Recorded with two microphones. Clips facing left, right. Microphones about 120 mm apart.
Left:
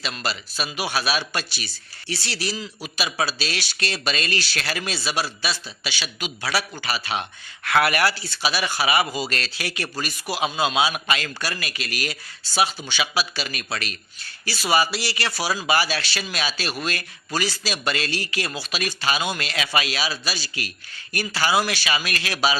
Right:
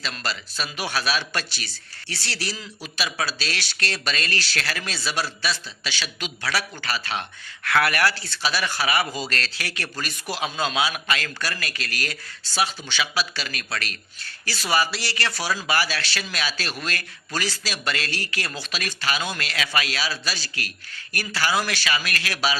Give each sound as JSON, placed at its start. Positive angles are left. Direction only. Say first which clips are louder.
{"t": 0.0, "sound": "speech", "louder": "left 2 dB", "side_deg": 15}